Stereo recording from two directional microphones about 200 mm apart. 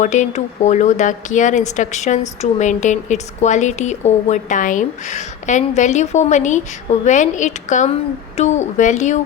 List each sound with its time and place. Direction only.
0.0 s a woman's voice: 35° left (ahead or behind)